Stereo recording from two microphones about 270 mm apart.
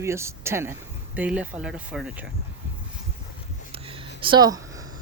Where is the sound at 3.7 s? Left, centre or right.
Centre.